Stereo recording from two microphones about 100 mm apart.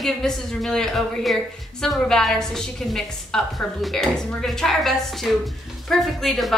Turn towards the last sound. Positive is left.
turn(degrees=0)  # may be behind; listen again after turning